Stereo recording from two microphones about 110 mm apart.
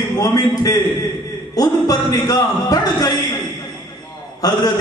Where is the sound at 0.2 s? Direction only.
40° left (ahead or behind).